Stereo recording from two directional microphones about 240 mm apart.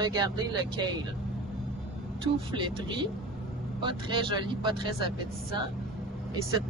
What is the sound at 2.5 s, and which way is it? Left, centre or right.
Speech, centre.